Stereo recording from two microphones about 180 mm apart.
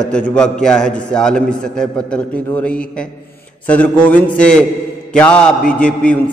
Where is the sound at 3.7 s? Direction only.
10° left (ahead or behind).